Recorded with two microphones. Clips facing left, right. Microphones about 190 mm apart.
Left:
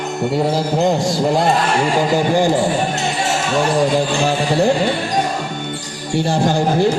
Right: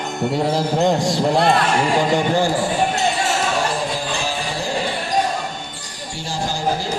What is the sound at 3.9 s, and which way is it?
Speech, 65° left (ahead or behind).